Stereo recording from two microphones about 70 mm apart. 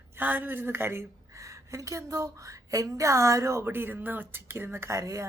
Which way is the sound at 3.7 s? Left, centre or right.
Right.